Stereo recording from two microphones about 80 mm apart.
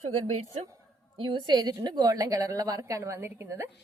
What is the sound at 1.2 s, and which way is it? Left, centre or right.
A woman's voice, right.